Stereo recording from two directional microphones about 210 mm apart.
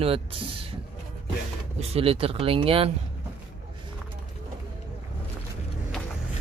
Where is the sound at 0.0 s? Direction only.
25° right (ahead or behind).